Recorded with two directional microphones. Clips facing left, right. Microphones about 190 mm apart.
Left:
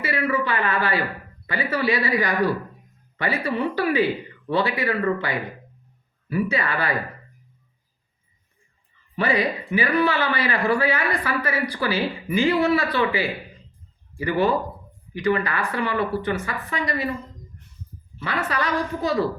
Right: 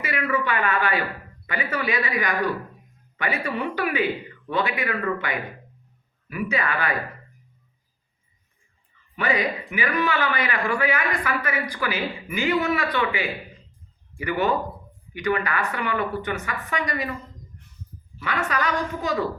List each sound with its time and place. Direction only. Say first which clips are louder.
0.0 s a woman's voice: left 2 dB; 30° left (ahead or behind)
9.1 s speech: left 2 dB; 30° left (ahead or behind)
18.2 s speech: even; 30° left (ahead or behind)